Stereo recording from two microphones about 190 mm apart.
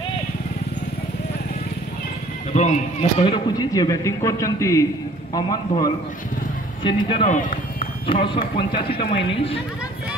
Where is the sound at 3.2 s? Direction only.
25° left (ahead or behind).